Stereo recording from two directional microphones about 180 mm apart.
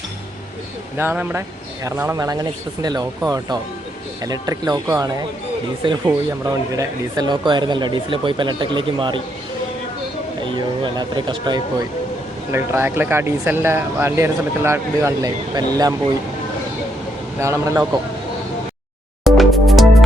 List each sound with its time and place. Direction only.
0.9 s speech: 10° right (ahead or behind); by 9.2 s 25° right (ahead or behind)
10.4 s speech: 25° right (ahead or behind)
12.5 s speech: 15° right (ahead or behind)
17.4 s speech: 15° right (ahead or behind)
19.2 s music: centre (ahead or behind)